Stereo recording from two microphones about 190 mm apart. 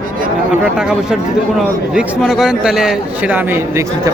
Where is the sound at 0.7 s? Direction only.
5° right (ahead or behind).